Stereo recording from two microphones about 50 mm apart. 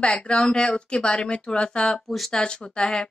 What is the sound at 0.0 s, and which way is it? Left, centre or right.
A woman's voice, centre.